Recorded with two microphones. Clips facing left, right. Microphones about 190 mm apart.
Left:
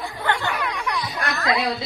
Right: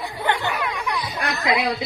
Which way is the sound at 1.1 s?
20° right (ahead or behind).